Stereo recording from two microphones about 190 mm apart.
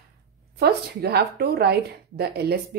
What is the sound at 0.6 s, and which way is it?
A woman's voice, 60° right (ahead or behind).